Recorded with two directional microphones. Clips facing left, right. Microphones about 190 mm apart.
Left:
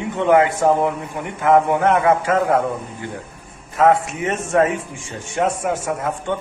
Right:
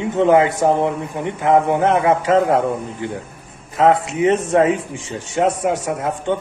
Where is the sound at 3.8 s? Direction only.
20° right (ahead or behind).